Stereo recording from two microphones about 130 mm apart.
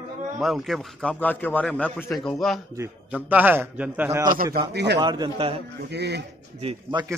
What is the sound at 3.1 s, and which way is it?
Speech, 15° right (ahead or behind).